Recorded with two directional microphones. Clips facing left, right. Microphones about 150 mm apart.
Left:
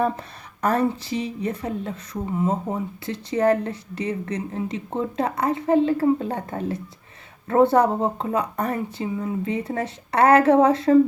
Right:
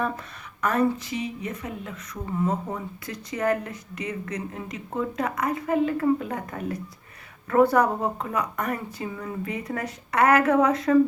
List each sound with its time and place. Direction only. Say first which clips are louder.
0.0 s a woman's voice: left 5 dB; 35° left (ahead or behind)
2.2 s speech: left 2 dB; 20° left (ahead or behind)